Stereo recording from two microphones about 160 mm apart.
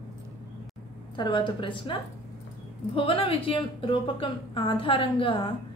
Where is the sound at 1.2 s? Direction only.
30° left (ahead or behind).